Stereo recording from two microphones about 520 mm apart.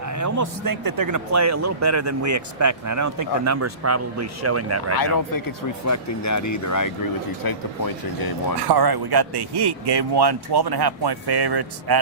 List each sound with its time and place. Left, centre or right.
0.0 s a man's voice: right
4.9 s speech: left
8.6 s a man's voice: right